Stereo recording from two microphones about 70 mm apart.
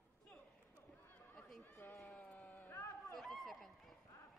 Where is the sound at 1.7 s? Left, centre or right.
Left.